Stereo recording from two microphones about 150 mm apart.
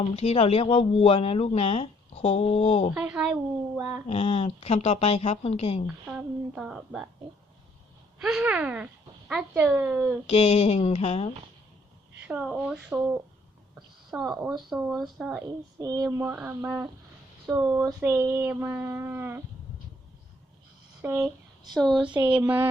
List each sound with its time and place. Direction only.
0.2 s speech: 45° left (ahead or behind)
2.9 s a woman's voice: 5° right (ahead or behind)
4.0 s speech: 45° left (ahead or behind)
5.8 s a woman's voice: 5° right (ahead or behind)
8.2 s a woman's voice: 10° right (ahead or behind)
10.2 s speech: 45° left (ahead or behind)
12.3 s a woman's voice: 5° right (ahead or behind)
15.8 s a woman's voice: 25° right (ahead or behind)
21.0 s speech: 10° right (ahead or behind)
22.3 s a woman's voice: 10° right (ahead or behind)